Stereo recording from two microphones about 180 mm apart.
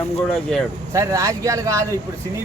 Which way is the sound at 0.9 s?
15° right (ahead or behind).